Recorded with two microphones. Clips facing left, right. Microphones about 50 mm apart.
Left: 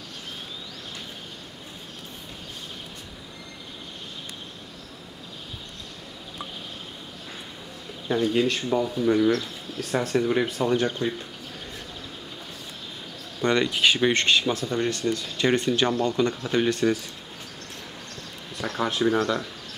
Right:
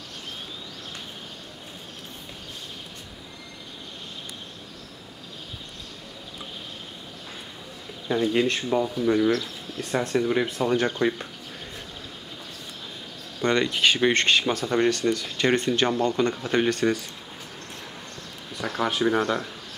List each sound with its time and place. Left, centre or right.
8.1 s speech: centre
10.8 s speech: right
13.6 s speech: centre
14.1 s speech: right
18.6 s speech: centre